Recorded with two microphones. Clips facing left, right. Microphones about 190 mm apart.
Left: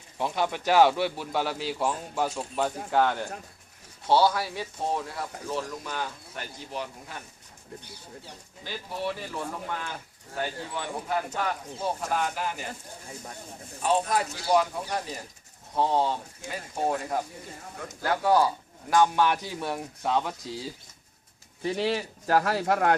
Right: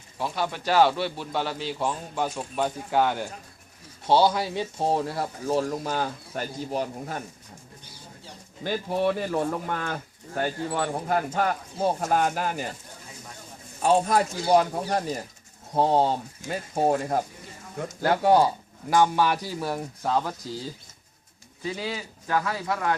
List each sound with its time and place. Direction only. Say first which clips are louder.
0.2 s speech: left 1 dB; 20° left (ahead or behind); by 3.2 s 5° right (ahead or behind)
4.0 s speech: right 2 dB; 15° right (ahead or behind); by 7.2 s 45° right (ahead or behind)
8.6 s speech: right 8 dB; 50° right (ahead or behind)
13.8 s speech: right 4 dB; 45° right (ahead or behind)
18.0 s speech: right 3 dB; 30° right (ahead or behind)
18.9 s speech: right 1 dB; 5° right (ahead or behind)
22.4 s speech: left 3 dB; 60° left (ahead or behind)